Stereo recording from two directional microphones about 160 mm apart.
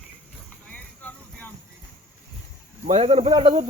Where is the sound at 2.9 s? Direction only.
40° right (ahead or behind).